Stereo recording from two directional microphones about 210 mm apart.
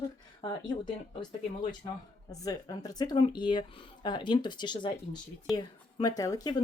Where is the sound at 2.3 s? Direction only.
15° left (ahead or behind).